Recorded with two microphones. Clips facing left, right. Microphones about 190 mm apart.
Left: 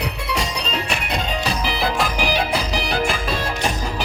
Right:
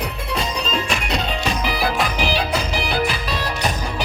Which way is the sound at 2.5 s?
40° left (ahead or behind).